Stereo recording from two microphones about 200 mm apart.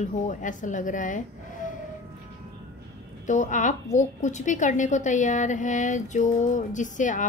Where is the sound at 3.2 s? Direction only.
40° left (ahead or behind).